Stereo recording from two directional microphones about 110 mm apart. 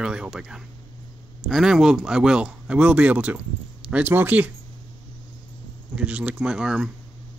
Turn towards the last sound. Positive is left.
turn(degrees=-5)  # may be behind; listen again after turning